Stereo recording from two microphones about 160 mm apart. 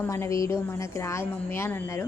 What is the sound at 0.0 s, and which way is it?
A woman's voice, 15° left (ahead or behind).